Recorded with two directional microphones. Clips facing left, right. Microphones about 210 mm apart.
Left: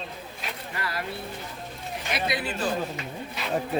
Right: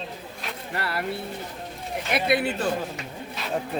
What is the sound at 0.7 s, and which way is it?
Speech, 65° right (ahead or behind).